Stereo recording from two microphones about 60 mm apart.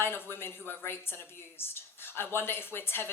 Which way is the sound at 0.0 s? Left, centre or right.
Left.